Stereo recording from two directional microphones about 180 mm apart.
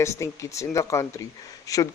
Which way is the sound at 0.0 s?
15° left (ahead or behind).